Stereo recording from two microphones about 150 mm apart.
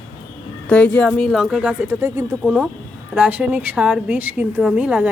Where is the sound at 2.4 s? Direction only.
5° right (ahead or behind).